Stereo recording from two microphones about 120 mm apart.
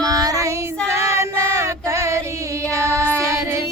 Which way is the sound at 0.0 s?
30° right (ahead or behind).